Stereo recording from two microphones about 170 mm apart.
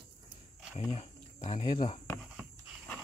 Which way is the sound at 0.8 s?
35° left (ahead or behind).